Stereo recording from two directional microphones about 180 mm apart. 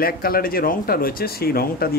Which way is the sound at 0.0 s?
55° left (ahead or behind).